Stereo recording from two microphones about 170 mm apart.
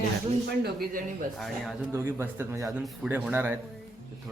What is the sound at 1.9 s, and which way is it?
Speech, 15° right (ahead or behind).